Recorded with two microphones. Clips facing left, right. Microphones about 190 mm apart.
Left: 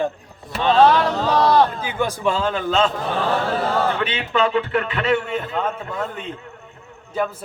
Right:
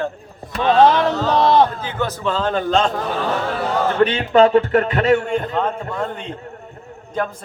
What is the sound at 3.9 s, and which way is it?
Speech, 45° right (ahead or behind).